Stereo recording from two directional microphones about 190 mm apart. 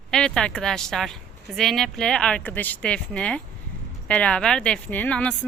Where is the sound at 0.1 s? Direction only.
5° left (ahead or behind).